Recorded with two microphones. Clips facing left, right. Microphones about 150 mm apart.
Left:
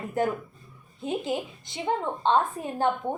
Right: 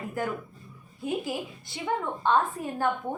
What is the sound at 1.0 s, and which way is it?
A woman's voice, 20° left (ahead or behind).